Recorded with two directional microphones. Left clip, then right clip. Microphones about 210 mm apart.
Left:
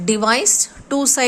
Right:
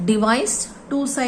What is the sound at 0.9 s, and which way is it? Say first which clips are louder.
Speech: left 4 dB; 50° left (ahead or behind).